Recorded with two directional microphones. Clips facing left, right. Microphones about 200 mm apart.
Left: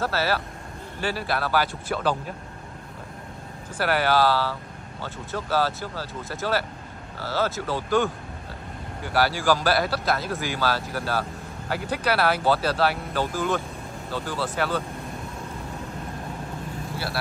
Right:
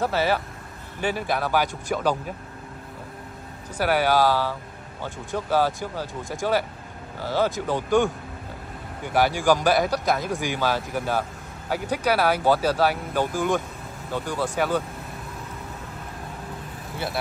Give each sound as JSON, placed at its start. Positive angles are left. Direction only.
{"t": 0.0, "sound": "speech", "side_deg": -15}
{"t": 3.7, "sound": "speech", "side_deg": -10}